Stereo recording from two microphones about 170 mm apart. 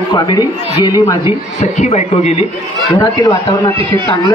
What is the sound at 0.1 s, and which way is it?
Speech, 25° left (ahead or behind).